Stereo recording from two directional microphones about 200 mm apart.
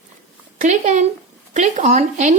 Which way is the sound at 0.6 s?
35° right (ahead or behind).